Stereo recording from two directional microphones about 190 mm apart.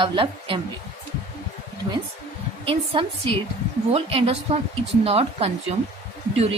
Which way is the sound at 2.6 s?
25° right (ahead or behind).